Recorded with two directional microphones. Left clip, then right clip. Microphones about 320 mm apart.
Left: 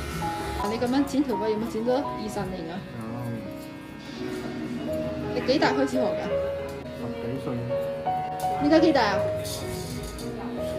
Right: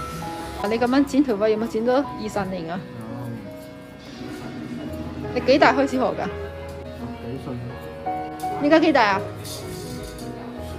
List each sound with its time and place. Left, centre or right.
0.3 s speech: centre
5.3 s speech: centre
8.6 s speech: centre